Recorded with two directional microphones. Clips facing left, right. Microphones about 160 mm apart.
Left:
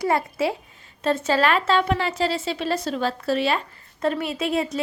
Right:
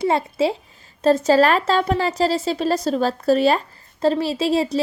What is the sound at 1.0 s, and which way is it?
A woman's voice, 40° right (ahead or behind).